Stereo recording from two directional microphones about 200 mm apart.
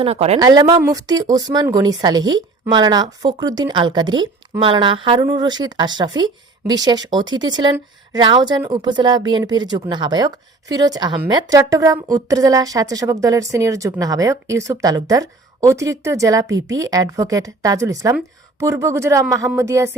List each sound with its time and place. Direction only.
0.0 s speech: 30° right (ahead or behind)
0.3 s a woman's voice: 20° right (ahead or behind)